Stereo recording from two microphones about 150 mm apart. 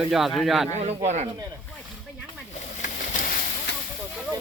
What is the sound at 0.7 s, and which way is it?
Speech, 50° right (ahead or behind).